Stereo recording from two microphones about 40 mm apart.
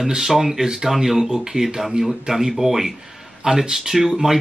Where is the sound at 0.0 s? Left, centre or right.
Centre.